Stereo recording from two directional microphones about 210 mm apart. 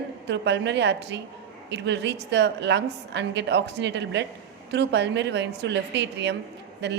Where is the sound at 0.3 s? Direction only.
55° right (ahead or behind).